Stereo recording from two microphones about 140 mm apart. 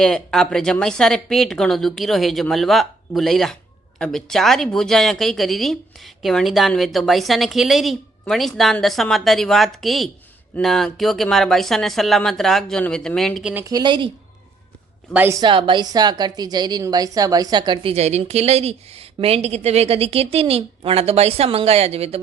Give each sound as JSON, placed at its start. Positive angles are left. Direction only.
{"t": 0.0, "sound": "speech", "side_deg": 5}
{"t": 13.4, "sound": "speech", "side_deg": -10}
{"t": 13.7, "sound": "speech", "side_deg": -30}
{"t": 15.1, "sound": "speech", "side_deg": -15}
{"t": 15.4, "sound": "a woman's voice", "side_deg": -35}
{"t": 17.9, "sound": "a woman's voice", "side_deg": -50}